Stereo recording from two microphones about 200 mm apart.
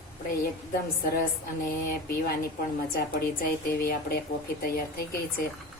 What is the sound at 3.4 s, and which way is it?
Speech, 50° left (ahead or behind).